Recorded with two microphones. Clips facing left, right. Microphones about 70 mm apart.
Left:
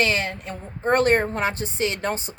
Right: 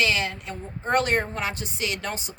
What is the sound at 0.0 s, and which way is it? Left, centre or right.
A woman's voice, left.